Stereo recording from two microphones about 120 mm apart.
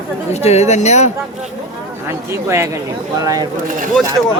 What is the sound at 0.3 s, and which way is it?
Speech, 65° left (ahead or behind).